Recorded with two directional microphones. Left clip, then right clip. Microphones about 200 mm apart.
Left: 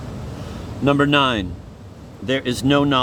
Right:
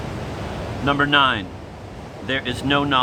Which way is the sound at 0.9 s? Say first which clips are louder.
Even; 50° left (ahead or behind).